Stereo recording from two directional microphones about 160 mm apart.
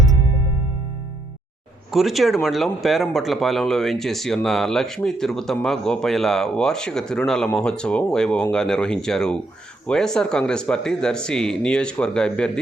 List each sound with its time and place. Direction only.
1.9 s speech: centre (ahead or behind)